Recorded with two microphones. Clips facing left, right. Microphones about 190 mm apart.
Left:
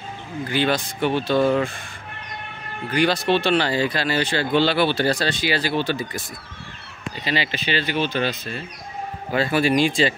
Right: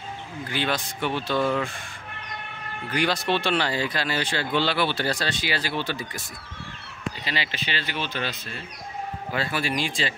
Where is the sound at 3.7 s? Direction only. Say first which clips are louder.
Left 5 dB; 80° left.